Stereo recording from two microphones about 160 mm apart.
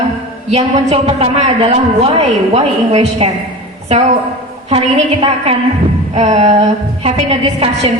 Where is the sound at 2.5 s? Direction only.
45° right (ahead or behind).